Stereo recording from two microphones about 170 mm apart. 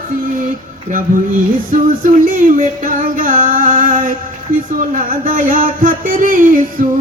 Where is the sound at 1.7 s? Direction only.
50° right (ahead or behind).